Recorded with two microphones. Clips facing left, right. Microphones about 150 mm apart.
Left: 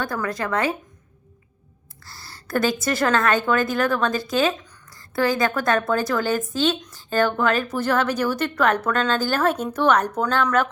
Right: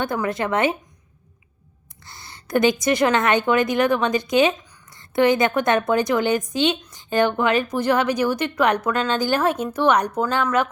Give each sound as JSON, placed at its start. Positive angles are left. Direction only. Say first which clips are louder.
{"t": 0.0, "sound": "a woman's voice", "louder": "right 3 dB", "side_deg": -25}
{"t": 2.0, "sound": "a sound", "louder": "right 1 dB", "side_deg": -20}
{"t": 2.8, "sound": "a woman's voice", "louder": "right 2 dB", "side_deg": -15}